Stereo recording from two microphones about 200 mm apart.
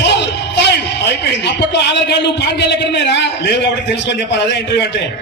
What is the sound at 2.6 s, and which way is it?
Speech, 60° left (ahead or behind).